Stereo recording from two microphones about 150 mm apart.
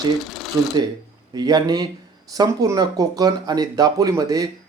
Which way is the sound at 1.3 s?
25° right (ahead or behind).